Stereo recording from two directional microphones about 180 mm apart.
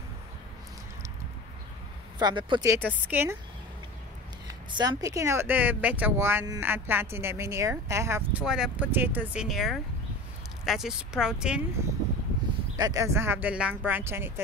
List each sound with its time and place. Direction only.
2.1 s speech: 25° right (ahead or behind)
2.7 s speech: 10° right (ahead or behind)
4.6 s speech: 25° right (ahead or behind)
8.5 s speech: 5° right (ahead or behind)
12.7 s speech: 20° right (ahead or behind)